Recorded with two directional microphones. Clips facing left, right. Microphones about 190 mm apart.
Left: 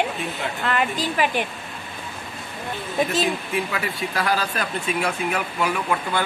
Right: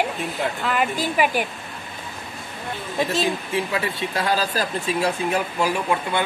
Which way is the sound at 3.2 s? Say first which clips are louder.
Right 1 dB; 25° right (ahead or behind).